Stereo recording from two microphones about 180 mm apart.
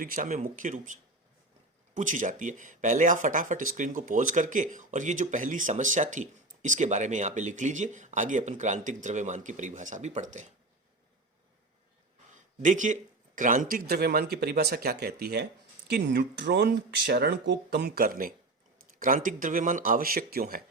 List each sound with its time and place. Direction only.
0.0 s speech: 50° right (ahead or behind)
2.0 s speech: 45° right (ahead or behind)
12.6 s speech: 45° right (ahead or behind)